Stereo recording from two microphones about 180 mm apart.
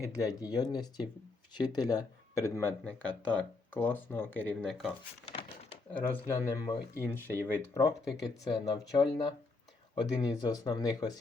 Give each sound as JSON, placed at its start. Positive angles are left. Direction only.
{"t": 0.1, "sound": "speech", "side_deg": 20}
{"t": 5.2, "sound": "a sound", "side_deg": 35}
{"t": 5.9, "sound": "speech", "side_deg": 10}